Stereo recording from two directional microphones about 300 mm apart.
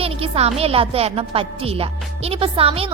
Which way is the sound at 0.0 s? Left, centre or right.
Centre.